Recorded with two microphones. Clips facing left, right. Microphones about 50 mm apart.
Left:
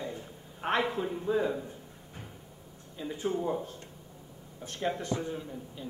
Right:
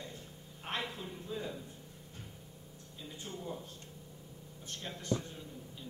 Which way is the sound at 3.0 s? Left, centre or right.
Left.